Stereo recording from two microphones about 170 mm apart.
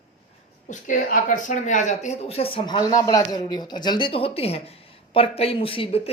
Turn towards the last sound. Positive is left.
turn(degrees=35)  # may be behind; listen again after turning